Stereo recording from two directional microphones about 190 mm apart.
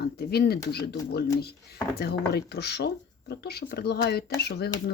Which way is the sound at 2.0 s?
60° left (ahead or behind).